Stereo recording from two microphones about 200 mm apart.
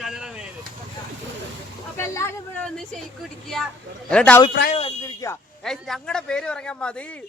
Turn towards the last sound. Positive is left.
turn(degrees=5)  # may be behind; listen again after turning